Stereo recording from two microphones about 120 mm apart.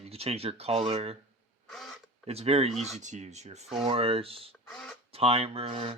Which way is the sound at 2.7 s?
Centre (ahead or behind).